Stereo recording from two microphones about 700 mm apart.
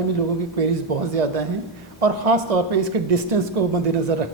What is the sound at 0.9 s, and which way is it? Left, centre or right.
Speech, right.